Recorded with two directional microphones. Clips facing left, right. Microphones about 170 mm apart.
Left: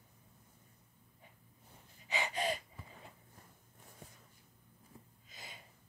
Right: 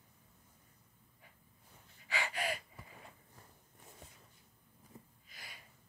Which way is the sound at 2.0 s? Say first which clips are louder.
Left 2 dB; 20° left (ahead or behind).